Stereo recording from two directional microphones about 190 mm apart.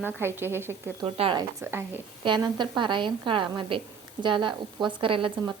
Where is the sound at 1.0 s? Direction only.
30° right (ahead or behind).